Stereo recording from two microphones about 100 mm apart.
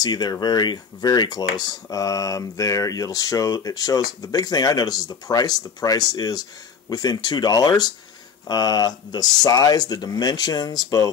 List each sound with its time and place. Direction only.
0.0 s speech: 45° left (ahead or behind)